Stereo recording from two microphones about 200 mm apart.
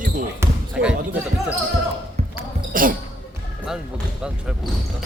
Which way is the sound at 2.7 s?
45° right (ahead or behind).